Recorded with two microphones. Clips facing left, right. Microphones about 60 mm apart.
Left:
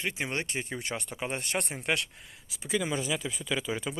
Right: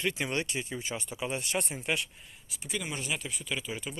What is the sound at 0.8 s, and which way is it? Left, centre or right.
Speech, left.